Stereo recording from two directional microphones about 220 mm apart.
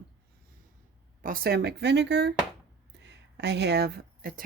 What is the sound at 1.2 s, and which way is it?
Speech, 40° right (ahead or behind).